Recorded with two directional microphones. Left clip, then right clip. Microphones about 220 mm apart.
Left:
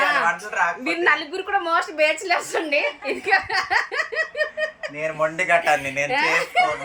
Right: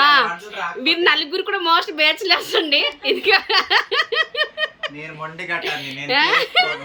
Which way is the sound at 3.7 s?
15° right (ahead or behind).